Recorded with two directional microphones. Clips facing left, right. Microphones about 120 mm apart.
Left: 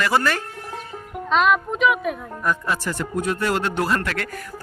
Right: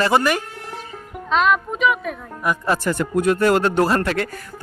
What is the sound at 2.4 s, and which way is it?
Speech, 10° right (ahead or behind).